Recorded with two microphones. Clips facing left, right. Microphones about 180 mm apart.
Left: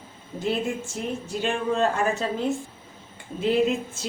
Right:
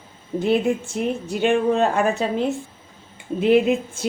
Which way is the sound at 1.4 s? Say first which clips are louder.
Right 6 dB; 65° right (ahead or behind).